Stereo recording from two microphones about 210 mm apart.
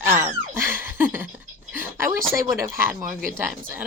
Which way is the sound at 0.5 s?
10° right (ahead or behind).